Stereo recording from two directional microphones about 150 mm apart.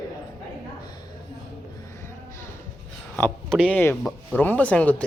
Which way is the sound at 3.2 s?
10° left (ahead or behind).